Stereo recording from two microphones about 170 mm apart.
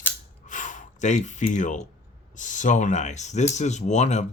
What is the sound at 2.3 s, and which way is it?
Speech, 45° left (ahead or behind).